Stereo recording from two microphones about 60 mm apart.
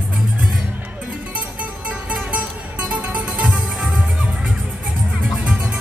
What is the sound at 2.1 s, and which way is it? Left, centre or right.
Music, right.